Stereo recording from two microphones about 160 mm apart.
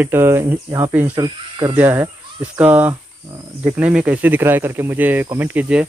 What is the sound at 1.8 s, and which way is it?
Speech, 15° right (ahead or behind).